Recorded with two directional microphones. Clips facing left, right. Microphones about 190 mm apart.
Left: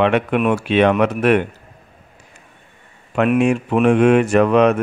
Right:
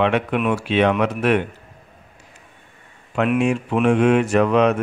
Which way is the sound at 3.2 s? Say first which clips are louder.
Left 3 dB; 55° left (ahead or behind).